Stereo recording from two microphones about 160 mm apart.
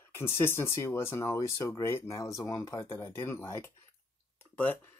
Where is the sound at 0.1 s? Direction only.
15° left (ahead or behind).